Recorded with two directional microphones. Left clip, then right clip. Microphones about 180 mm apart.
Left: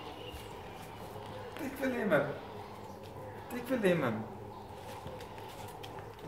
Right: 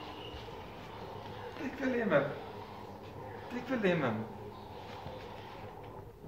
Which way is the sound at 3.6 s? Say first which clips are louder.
Left 1 dB; 40° left (ahead or behind).